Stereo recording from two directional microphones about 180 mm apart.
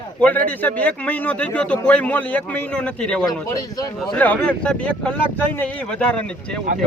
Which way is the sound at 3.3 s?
20° left (ahead or behind).